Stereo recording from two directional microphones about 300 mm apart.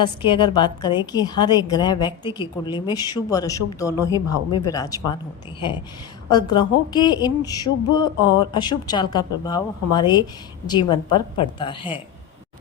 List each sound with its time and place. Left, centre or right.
0.0 s a woman's voice: centre